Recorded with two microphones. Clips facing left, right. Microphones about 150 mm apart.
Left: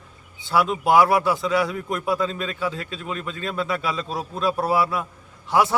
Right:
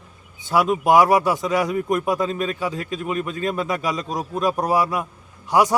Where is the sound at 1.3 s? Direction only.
45° right (ahead or behind).